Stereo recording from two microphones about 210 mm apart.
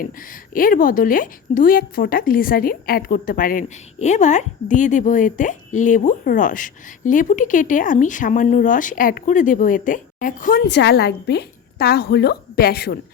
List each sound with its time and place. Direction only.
0.0 s a woman's voice: 40° left (ahead or behind)